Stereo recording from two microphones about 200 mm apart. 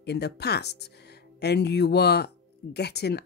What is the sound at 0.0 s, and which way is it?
Speech, 55° left (ahead or behind).